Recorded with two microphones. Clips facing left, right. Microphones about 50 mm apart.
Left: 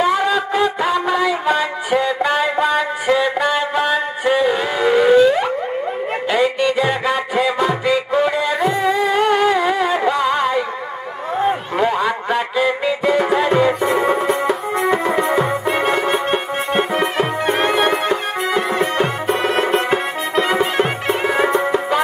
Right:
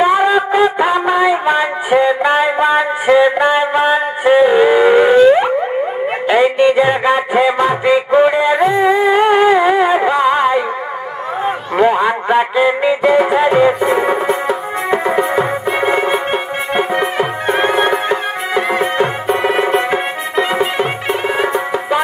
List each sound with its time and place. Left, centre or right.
0.0 s music: centre
16.7 s music: centre
17.2 s music: centre
19.4 s music: centre